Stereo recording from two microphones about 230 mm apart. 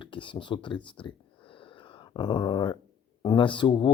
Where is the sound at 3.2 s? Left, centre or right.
Centre.